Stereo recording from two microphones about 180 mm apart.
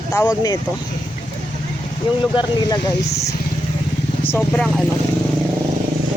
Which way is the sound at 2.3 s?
25° left (ahead or behind).